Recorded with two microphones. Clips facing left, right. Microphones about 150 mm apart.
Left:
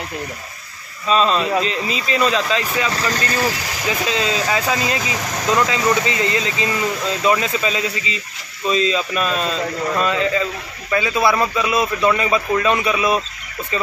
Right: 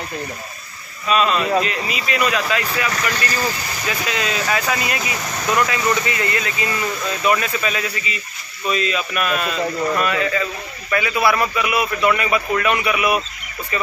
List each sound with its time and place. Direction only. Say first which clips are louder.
1.0 s speech: left 1 dB; 30° left (ahead or behind)